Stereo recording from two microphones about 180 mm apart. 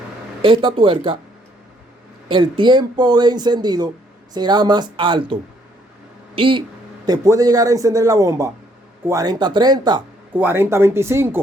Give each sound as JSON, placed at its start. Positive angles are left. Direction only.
{"t": 0.4, "sound": "speech", "side_deg": -30}
{"t": 2.3, "sound": "speech", "side_deg": -25}
{"t": 10.3, "sound": "speech", "side_deg": -10}